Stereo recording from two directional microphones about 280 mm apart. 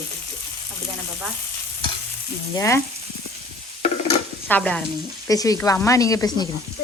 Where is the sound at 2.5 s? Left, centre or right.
Centre.